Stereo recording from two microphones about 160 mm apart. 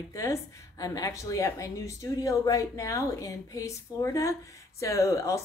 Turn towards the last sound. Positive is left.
turn(degrees=20)  # may be behind; listen again after turning